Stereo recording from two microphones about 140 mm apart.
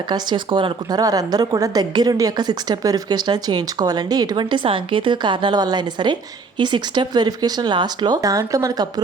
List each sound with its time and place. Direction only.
0.1 s a woman's voice: 35° right (ahead or behind)